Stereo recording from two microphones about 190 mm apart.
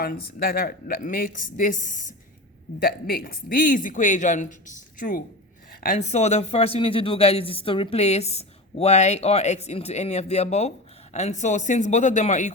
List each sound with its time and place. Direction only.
0.0 s a woman's voice: 50° left (ahead or behind)
2.8 s a woman's voice: 55° left (ahead or behind)